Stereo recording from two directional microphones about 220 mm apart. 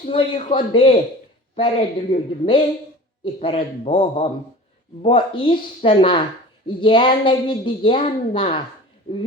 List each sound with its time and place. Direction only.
0.0 s a woman's voice: 25° left (ahead or behind)